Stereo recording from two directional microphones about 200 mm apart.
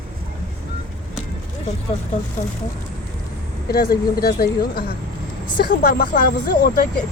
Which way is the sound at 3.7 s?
50° left (ahead or behind).